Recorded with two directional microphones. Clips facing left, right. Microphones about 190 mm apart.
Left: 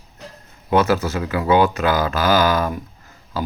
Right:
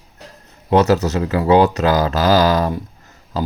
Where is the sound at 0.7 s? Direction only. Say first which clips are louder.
Right 3 dB; 40° right (ahead or behind).